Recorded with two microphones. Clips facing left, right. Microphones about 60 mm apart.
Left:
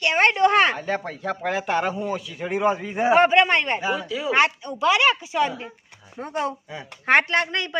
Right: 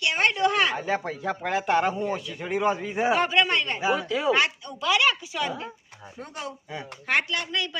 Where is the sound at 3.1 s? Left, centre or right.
Left.